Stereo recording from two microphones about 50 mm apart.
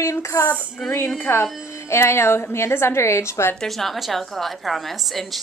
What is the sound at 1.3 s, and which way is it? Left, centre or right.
A woman's voice, left.